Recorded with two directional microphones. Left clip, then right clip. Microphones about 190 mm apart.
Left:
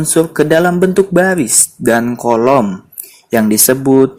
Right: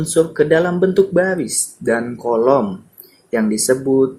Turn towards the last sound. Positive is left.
turn(degrees=45)  # may be behind; listen again after turning